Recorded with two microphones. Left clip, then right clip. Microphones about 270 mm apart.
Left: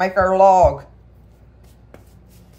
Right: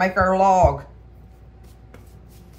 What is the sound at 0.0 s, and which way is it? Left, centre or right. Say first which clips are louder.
Speech: left 4 dB; centre.